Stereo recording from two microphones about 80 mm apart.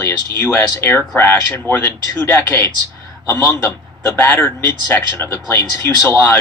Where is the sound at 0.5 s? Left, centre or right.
Left.